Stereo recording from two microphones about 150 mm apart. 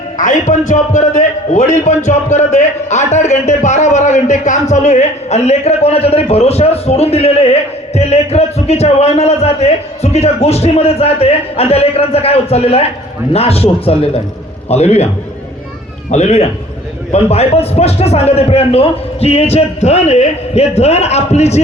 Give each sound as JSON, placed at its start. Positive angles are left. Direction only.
{"t": 0.2, "sound": "a man's voice", "side_deg": 55}
{"t": 16.1, "sound": "a man's voice", "side_deg": 45}